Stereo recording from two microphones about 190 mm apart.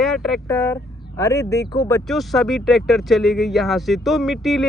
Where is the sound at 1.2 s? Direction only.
15° left (ahead or behind).